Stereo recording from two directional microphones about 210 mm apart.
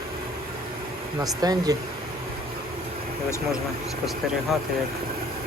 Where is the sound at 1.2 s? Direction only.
20° right (ahead or behind).